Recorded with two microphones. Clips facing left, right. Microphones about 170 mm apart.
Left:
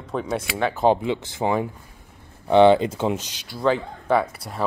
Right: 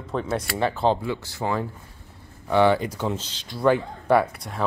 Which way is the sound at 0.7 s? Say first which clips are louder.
Left 7 dB; 15° left (ahead or behind).